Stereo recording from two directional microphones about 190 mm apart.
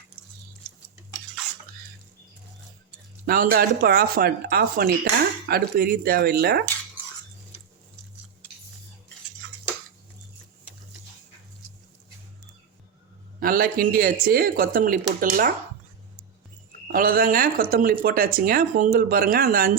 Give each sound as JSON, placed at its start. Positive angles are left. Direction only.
{"t": 3.2, "sound": "speech", "side_deg": -50}
{"t": 13.4, "sound": "speech", "side_deg": -50}
{"t": 16.9, "sound": "speech", "side_deg": -50}